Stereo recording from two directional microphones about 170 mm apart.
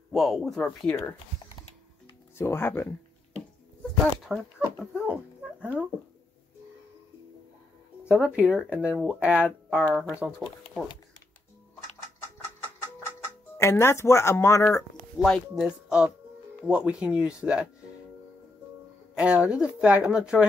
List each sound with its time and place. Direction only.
0.1 s speech: centre (ahead or behind)
2.3 s speech: 15° left (ahead or behind)
4.2 s speech: centre (ahead or behind)
8.1 s speech: 10° right (ahead or behind)
13.6 s speech: 15° left (ahead or behind)
15.2 s speech: 5° left (ahead or behind)
16.6 s speech: 5° right (ahead or behind)
19.1 s speech: 5° right (ahead or behind)